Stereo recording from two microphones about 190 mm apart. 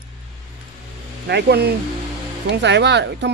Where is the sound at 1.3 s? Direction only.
60° right (ahead or behind).